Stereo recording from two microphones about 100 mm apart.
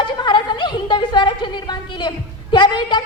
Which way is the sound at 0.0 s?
55° left (ahead or behind).